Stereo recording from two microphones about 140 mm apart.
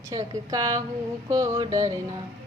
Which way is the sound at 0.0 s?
25° right (ahead or behind).